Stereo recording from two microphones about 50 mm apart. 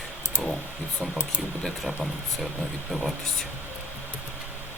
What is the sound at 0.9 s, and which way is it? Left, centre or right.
Speech, centre.